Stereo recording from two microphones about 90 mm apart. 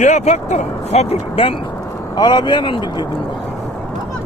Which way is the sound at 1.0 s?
85° left.